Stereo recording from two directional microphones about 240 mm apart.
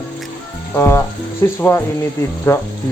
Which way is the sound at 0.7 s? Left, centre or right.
Centre.